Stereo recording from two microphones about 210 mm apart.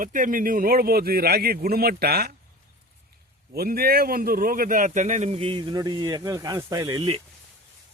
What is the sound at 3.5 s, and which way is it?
Speech, 45° right (ahead or behind).